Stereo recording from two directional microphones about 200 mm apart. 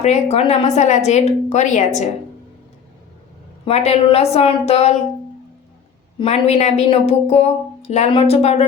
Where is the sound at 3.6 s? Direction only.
30° left (ahead or behind).